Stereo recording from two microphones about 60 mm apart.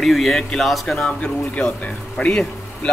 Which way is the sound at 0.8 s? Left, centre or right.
Centre.